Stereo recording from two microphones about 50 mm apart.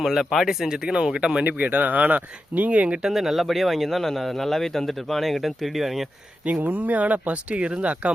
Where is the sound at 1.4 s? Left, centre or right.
Right.